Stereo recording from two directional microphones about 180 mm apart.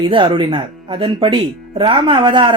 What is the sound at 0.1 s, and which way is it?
Speech, 25° right (ahead or behind).